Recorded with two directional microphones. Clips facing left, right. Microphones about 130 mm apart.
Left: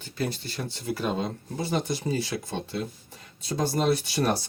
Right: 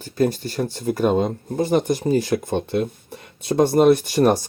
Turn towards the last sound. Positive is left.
turn(degrees=-45)  # may be behind; listen again after turning